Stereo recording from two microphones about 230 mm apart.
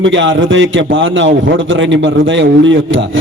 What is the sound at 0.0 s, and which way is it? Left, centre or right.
A man's voice, right.